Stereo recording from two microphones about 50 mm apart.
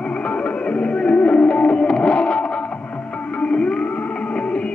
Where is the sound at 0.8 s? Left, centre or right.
Left.